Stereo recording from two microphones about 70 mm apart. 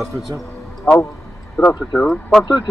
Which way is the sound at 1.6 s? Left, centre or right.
Centre.